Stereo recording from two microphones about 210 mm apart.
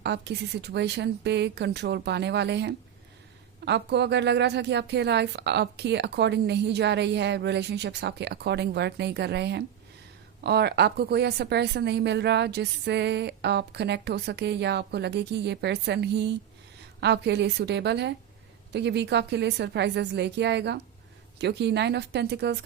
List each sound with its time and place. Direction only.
0.0 s a woman's voice: 55° right (ahead or behind)